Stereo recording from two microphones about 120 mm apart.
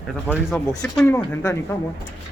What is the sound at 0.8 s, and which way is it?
Speech, 5° left (ahead or behind).